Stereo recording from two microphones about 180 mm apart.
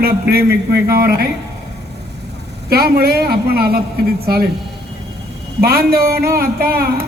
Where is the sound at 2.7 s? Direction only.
60° right (ahead or behind).